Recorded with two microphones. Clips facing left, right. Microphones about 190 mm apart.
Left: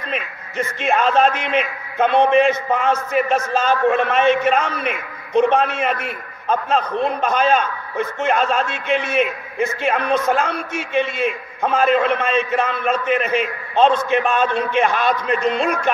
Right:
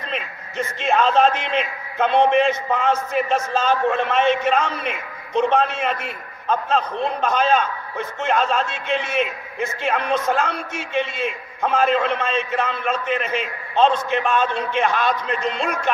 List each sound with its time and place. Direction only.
0.1 s a man's voice: 10° left (ahead or behind)